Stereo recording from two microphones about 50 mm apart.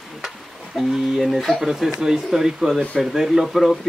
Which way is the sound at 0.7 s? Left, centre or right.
Centre.